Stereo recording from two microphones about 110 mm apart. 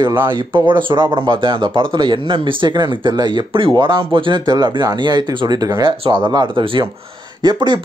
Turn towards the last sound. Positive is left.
turn(degrees=-45)  # may be behind; listen again after turning